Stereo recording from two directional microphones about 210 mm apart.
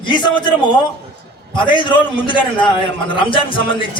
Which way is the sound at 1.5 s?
25° left (ahead or behind).